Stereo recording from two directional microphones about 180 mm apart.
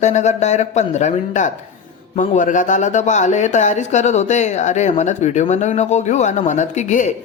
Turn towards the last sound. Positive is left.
turn(degrees=40)  # may be behind; listen again after turning